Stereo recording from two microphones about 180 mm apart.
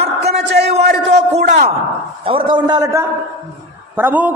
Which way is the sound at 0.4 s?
70° right (ahead or behind).